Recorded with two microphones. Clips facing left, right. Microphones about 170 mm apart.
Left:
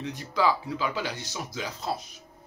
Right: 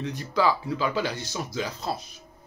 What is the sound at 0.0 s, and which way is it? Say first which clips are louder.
Speech: right 2 dB; 15° left (ahead or behind).